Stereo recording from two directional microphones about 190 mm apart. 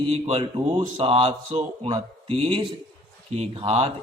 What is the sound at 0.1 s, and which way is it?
Speech, 30° right (ahead or behind).